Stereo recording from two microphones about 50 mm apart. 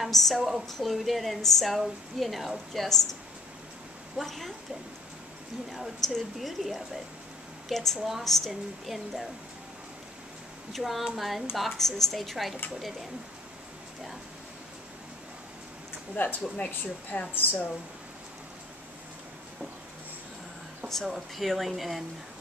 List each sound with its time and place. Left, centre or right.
0.4 s a woman's voice: centre
0.7 s a woman's voice: centre
4.2 s a woman's voice: centre
5.7 s a woman's voice: centre
10.7 s a woman's voice: centre
16.2 s speech: left
16.5 s speech: left
17.3 s speech: left
20.9 s a woman's voice: centre